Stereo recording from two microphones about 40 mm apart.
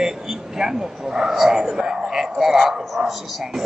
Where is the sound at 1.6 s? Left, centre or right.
Centre.